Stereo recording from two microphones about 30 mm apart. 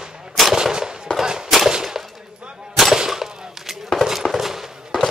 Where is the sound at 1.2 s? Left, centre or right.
Right.